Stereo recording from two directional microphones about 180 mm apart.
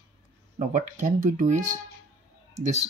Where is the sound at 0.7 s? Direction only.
45° right (ahead or behind).